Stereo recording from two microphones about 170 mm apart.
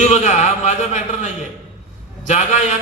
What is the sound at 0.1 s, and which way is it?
A man's voice, 45° left (ahead or behind).